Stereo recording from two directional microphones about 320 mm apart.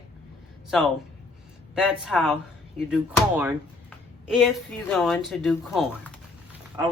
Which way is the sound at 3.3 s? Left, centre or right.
Centre.